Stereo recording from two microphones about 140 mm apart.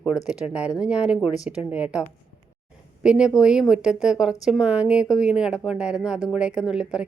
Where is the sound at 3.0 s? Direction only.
5° right (ahead or behind).